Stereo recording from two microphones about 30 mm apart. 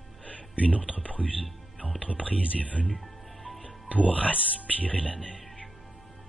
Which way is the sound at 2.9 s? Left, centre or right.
Centre.